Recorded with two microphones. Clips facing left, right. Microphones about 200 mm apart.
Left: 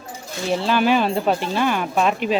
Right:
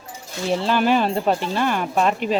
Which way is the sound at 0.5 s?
5° left (ahead or behind).